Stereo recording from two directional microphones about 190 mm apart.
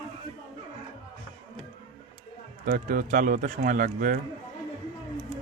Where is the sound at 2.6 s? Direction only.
50° right (ahead or behind).